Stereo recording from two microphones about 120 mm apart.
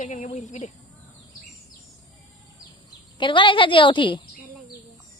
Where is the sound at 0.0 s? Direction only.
90° left.